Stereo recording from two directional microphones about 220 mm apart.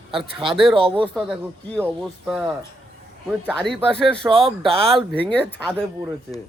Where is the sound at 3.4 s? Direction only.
Centre (ahead or behind).